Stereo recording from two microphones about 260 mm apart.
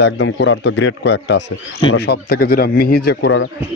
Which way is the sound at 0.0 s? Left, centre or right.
Left.